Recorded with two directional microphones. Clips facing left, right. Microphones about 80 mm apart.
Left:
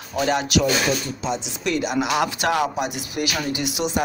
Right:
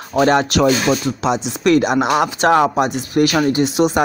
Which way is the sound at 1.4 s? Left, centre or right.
Right.